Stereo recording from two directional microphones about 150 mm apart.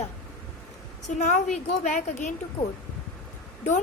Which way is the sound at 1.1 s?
55° left (ahead or behind).